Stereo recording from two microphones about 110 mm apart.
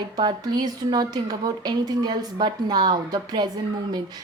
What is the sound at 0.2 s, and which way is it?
A woman's voice, 40° right (ahead or behind).